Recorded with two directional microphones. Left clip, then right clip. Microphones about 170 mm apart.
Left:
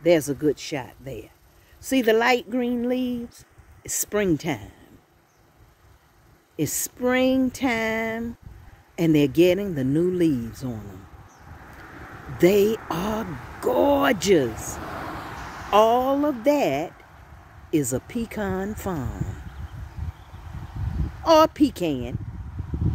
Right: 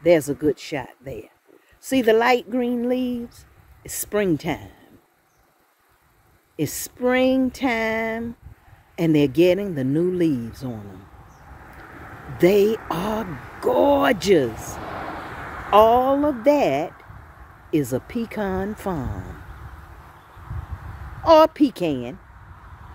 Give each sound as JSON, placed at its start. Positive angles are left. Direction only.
{"t": 0.0, "sound": "speech", "side_deg": 0}
{"t": 6.5, "sound": "speech", "side_deg": 5}
{"t": 14.5, "sound": "speech", "side_deg": 90}
{"t": 15.4, "sound": "a sound", "side_deg": 90}
{"t": 15.7, "sound": "speech", "side_deg": 5}
{"t": 21.2, "sound": "speech", "side_deg": 5}